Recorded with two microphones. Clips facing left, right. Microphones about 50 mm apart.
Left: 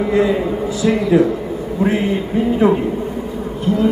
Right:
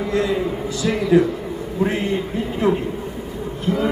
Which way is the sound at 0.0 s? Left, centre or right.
Centre.